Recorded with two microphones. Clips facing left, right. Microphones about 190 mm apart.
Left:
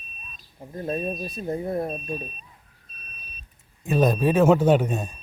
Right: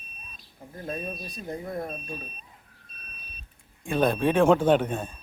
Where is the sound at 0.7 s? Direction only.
30° left (ahead or behind).